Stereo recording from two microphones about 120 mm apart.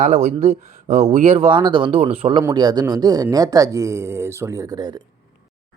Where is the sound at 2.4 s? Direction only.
35° right (ahead or behind).